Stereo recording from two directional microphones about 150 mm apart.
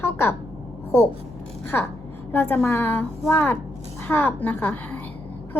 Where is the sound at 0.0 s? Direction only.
15° left (ahead or behind).